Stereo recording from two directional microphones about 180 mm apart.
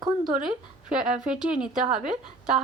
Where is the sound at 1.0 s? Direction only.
5° right (ahead or behind).